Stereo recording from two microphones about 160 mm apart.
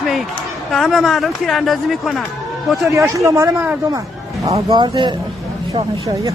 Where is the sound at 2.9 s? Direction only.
20° right (ahead or behind).